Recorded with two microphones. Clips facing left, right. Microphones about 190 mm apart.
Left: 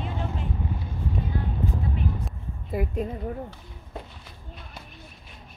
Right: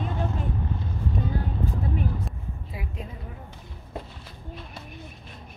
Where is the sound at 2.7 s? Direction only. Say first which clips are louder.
Left 12 dB; 50° left (ahead or behind).